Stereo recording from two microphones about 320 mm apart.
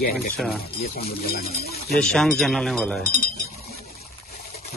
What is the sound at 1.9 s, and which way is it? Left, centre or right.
Speech, centre.